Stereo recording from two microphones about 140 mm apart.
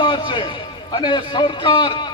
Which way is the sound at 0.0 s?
35° left (ahead or behind).